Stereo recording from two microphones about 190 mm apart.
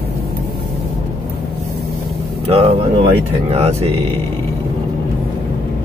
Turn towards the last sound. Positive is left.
turn(degrees=-30)  # may be behind; listen again after turning